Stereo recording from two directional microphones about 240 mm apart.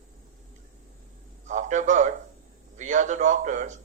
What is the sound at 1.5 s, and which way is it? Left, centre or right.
A man's voice, right.